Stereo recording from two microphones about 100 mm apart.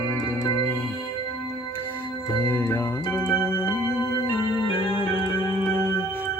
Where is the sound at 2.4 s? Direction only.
25° left (ahead or behind).